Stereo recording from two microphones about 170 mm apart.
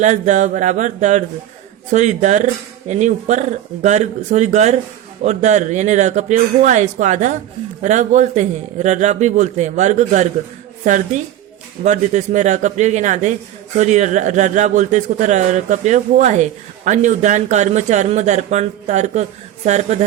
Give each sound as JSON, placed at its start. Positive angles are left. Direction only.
{"t": 0.0, "sound": "a man's voice", "side_deg": -45}